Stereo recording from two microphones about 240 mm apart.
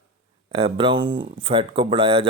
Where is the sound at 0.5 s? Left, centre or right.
Right.